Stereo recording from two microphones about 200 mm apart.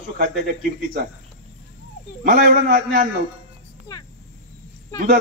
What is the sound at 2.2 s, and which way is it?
Speech, 45° right (ahead or behind).